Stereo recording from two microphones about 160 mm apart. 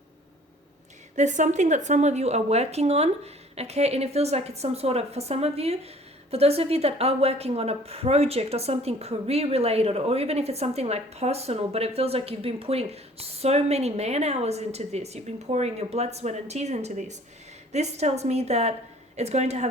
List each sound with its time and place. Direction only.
1.1 s a woman's voice: 50° right (ahead or behind)